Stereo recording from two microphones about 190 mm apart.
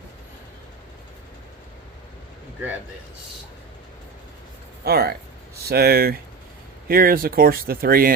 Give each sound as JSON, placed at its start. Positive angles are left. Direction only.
{"t": 4.8, "sound": "speech", "side_deg": -55}